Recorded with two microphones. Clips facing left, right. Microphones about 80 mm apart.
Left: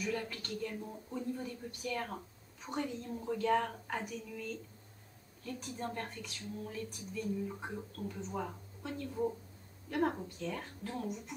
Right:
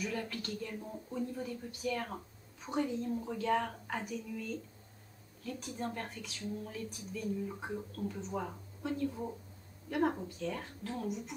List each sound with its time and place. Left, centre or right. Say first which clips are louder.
0.0 s a woman's voice: even; centre